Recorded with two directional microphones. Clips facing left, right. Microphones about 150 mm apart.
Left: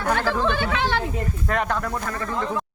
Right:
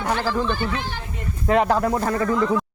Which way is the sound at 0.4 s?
70° left (ahead or behind).